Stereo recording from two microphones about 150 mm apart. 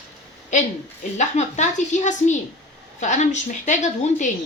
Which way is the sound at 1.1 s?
50° left (ahead or behind).